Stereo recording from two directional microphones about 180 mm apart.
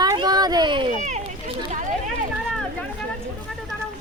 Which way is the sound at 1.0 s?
40° right (ahead or behind).